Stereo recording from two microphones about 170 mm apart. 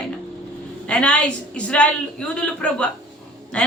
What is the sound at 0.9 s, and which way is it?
A woman's voice, 5° left (ahead or behind).